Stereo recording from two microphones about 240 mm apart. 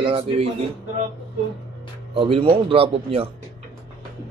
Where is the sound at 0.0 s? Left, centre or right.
Right.